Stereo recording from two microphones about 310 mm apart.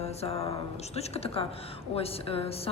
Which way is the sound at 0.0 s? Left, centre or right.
Centre.